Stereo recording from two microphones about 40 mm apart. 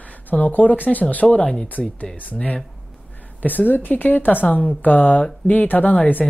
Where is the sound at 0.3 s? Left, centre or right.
Left.